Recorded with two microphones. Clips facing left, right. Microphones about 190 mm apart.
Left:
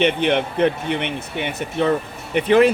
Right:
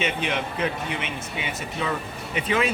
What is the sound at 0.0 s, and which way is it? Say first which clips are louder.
Speech: left 9 dB; 60° left (ahead or behind).